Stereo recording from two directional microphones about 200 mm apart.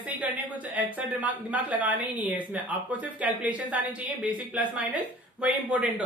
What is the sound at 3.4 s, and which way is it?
Speech, 5° right (ahead or behind).